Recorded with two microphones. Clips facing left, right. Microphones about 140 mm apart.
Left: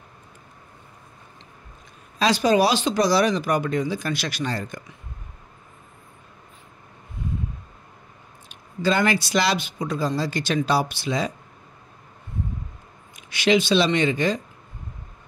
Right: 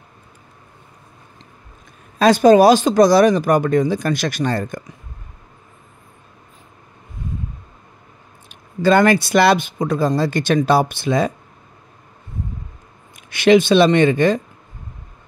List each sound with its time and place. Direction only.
2.1 s speech: 50° right (ahead or behind)
8.5 s speech: 50° right (ahead or behind)
13.3 s speech: 55° right (ahead or behind)